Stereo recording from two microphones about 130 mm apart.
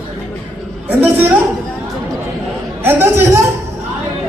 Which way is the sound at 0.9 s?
15° right (ahead or behind).